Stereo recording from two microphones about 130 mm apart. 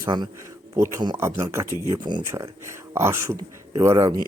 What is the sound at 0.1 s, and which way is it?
Speech, 35° right (ahead or behind).